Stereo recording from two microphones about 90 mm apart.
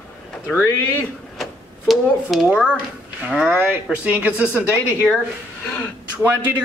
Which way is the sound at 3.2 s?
15° right (ahead or behind).